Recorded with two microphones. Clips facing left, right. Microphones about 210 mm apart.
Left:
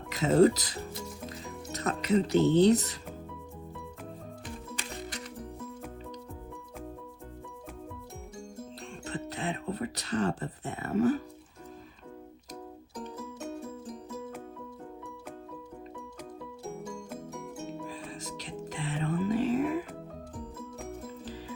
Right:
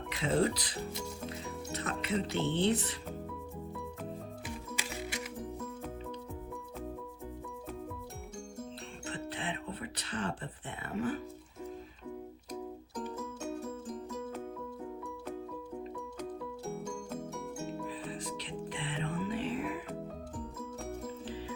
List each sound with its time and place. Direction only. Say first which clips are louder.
0.1 s speech: left 8 dB; 40° left (ahead or behind)
1.3 s music: even; 40° left (ahead or behind)
2.3 s speech: left 9 dB; 40° left (ahead or behind)
4.4 s music: left 1 dB; 10° right (ahead or behind)
9.0 s music: left 4 dB; 40° left (ahead or behind)
14.1 s music: left 1 dB; centre (ahead or behind)
16.6 s music: left 2 dB; 5° left (ahead or behind)
17.8 s music: right 1 dB; 45° left (ahead or behind)
21.2 s music: right 1 dB; 40° left (ahead or behind)